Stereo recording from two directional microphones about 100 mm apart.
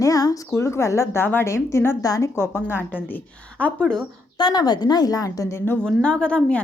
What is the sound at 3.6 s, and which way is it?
Speech, 15° left (ahead or behind).